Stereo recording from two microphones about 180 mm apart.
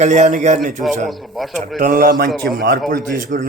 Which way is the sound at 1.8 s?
50° right (ahead or behind).